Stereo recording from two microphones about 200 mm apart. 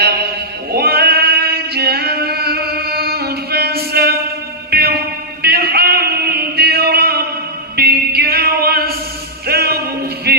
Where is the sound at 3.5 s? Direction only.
50° right (ahead or behind).